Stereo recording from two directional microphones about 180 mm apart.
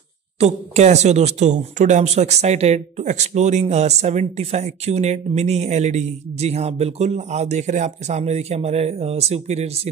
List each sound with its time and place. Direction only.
0.4 s speech: 35° right (ahead or behind)